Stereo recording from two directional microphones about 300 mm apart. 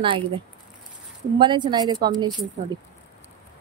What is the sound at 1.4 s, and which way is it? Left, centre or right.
Speech, centre.